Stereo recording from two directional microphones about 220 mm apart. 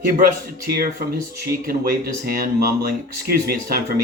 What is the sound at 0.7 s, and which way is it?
Speech, 45° right (ahead or behind).